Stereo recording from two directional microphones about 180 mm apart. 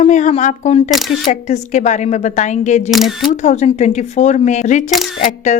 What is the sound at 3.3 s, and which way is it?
A woman's voice, 40° left (ahead or behind).